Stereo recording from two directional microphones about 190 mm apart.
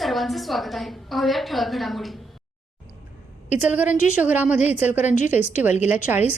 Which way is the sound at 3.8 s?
40° left (ahead or behind).